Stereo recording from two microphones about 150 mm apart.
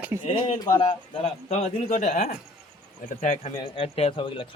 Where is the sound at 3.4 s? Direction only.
35° left (ahead or behind).